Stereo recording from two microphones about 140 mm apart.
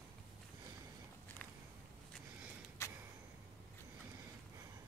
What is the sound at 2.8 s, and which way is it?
Vehicle, 20° left (ahead or behind).